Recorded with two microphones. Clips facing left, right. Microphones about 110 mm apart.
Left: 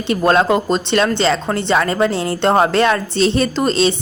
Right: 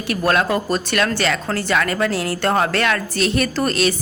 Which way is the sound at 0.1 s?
25° left (ahead or behind).